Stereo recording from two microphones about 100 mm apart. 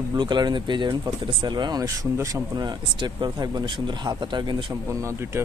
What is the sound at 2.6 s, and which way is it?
Speech, 45° right (ahead or behind).